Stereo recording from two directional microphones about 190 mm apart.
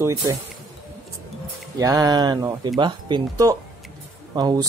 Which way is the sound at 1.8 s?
20° right (ahead or behind).